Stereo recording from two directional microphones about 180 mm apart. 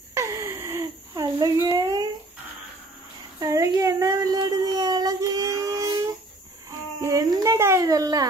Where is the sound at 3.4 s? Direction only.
20° right (ahead or behind).